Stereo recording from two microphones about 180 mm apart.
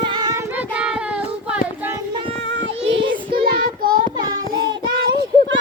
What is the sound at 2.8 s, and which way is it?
Child singing, 90° right.